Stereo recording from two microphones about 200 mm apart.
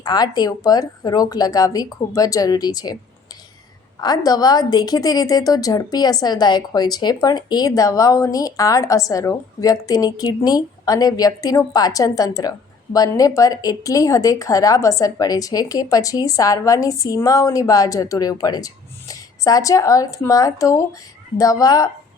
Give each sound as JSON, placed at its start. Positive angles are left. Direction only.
{"t": 0.0, "sound": "speech", "side_deg": 20}
{"t": 4.0, "sound": "a woman's voice", "side_deg": 20}